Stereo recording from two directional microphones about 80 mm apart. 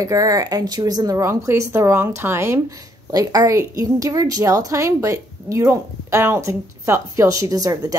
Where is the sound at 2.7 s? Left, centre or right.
Right.